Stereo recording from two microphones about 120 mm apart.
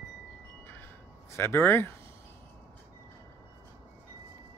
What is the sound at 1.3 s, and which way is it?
Speech, 20° left (ahead or behind).